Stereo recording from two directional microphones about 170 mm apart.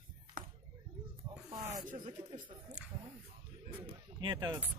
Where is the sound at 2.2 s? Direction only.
15° right (ahead or behind).